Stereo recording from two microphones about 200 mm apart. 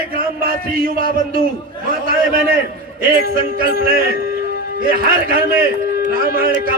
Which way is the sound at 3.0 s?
45° right (ahead or behind).